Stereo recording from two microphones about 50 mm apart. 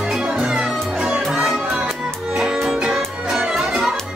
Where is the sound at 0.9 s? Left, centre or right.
Centre.